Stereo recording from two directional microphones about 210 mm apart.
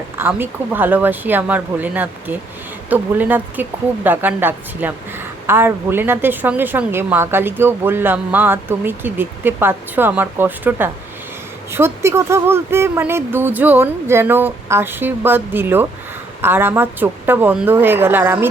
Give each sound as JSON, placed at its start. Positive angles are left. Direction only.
{"t": 0.2, "sound": "a woman's voice", "side_deg": -10}